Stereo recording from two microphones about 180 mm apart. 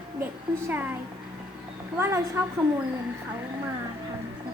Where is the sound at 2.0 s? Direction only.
15° right (ahead or behind).